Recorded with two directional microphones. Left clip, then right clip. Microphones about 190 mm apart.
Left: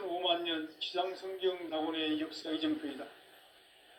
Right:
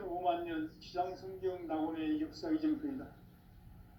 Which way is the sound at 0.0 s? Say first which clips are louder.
Left 2 dB; 40° left (ahead or behind).